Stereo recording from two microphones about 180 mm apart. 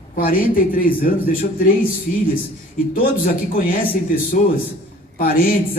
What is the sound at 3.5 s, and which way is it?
Speech, 55° left (ahead or behind).